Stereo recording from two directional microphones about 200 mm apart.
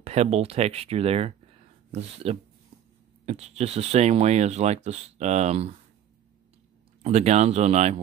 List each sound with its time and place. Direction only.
0.0 s speech: 30° right (ahead or behind)
7.0 s speech: 35° right (ahead or behind)